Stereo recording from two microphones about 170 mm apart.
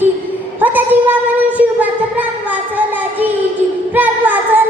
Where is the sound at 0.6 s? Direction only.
10° right (ahead or behind).